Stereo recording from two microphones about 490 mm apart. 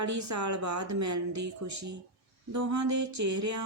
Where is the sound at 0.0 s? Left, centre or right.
Right.